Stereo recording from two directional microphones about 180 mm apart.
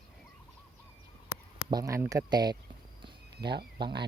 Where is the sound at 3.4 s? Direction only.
65° right (ahead or behind).